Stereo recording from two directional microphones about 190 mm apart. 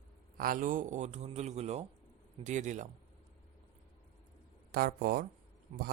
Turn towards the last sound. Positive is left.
turn(degrees=-40)  # may be behind; listen again after turning